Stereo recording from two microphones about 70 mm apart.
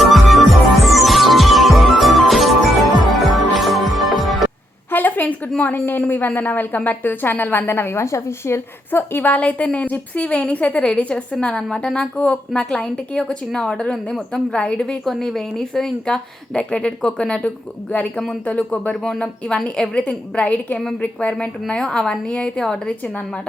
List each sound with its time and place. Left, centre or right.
0.0 s music: centre
4.9 s a sound: left
6.0 s a woman's voice: left
15.0 s a woman's voice: centre